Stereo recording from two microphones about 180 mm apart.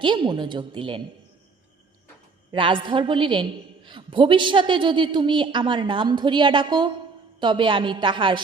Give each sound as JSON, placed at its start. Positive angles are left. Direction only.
{"t": 0.0, "sound": "a woman's voice", "side_deg": -25}
{"t": 2.5, "sound": "a woman's voice", "side_deg": -30}